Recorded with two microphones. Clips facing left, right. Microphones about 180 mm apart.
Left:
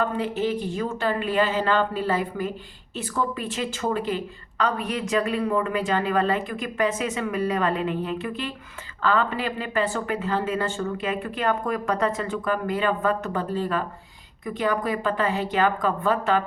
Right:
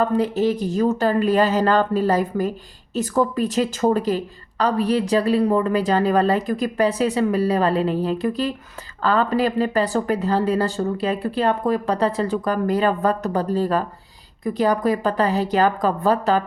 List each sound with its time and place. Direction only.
0.0 s a woman's voice: 40° right (ahead or behind)